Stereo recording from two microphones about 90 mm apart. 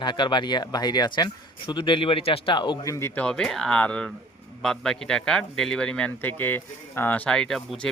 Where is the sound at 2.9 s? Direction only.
30° left (ahead or behind).